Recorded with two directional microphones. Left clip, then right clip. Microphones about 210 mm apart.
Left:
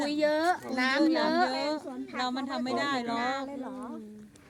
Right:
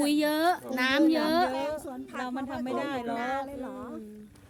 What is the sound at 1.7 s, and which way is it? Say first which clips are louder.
A woman's voice: left 1 dB; 50° left (ahead or behind).